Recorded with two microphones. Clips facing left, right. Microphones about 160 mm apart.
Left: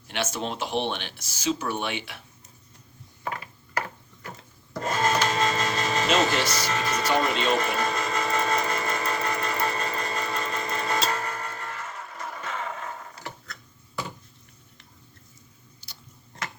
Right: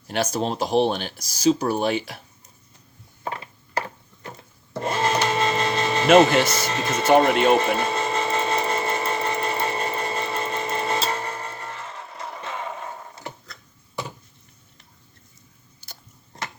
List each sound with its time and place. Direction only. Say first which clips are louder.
0.1 s speech: right 6 dB; 40° right (ahead or behind)
3.2 s a sound: right 2 dB; 25° right (ahead or behind)
4.7 s cash register: right 2 dB; 30° right (ahead or behind)
6.1 s speech: right 11 dB; 55° right (ahead or behind)
6.5 s speech: right 2 dB; 25° right (ahead or behind)
7.3 s speech: right 7 dB; 60° right (ahead or behind)
7.5 s tools: right 5 dB; 30° right (ahead or behind)
15.8 s a sound: right 6 dB; 45° right (ahead or behind)